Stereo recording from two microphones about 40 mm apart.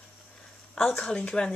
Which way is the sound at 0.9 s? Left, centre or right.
Centre.